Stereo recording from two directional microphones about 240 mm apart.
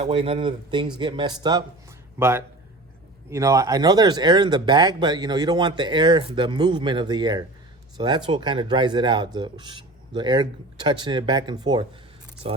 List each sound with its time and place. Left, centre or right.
0.0 s speech: right